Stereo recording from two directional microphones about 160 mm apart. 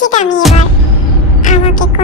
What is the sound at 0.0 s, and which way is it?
Music, 50° left (ahead or behind).